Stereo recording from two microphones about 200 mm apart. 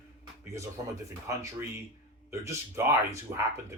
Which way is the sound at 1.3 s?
15° right (ahead or behind).